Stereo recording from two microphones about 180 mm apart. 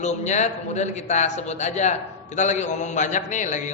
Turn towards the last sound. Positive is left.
turn(degrees=40)  # may be behind; listen again after turning